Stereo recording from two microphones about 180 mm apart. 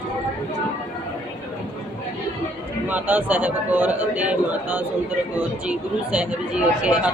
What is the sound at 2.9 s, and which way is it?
Speech, 10° right (ahead or behind).